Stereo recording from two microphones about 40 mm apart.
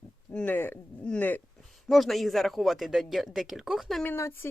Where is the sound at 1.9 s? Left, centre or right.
Centre.